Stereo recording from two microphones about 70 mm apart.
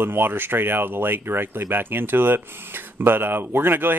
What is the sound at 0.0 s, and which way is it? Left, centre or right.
Speech, right.